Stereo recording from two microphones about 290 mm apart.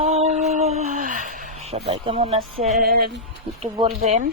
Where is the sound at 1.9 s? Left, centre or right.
Right.